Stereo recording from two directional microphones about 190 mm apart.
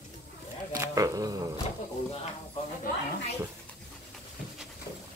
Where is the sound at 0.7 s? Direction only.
15° right (ahead or behind).